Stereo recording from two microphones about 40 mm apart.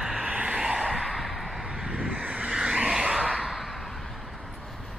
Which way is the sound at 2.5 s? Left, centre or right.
Centre.